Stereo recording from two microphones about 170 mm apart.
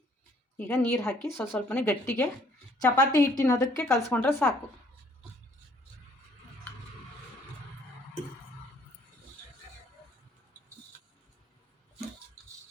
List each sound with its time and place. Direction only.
0.5 s a woman's voice: 10° left (ahead or behind)